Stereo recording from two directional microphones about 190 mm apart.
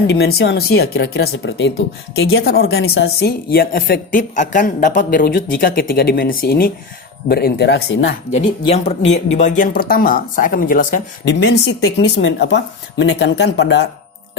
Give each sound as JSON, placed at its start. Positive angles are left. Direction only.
{"t": 0.1, "sound": "speech", "side_deg": 55}
{"t": 2.4, "sound": "a woman's voice", "side_deg": 55}
{"t": 8.3, "sound": "a woman's voice", "side_deg": 35}
{"t": 11.3, "sound": "speech", "side_deg": 65}